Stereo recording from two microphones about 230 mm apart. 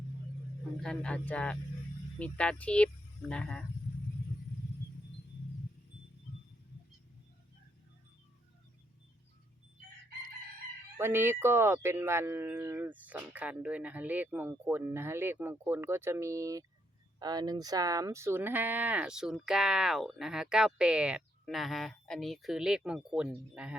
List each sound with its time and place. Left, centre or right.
0.8 s speech: centre
10.9 s speech: centre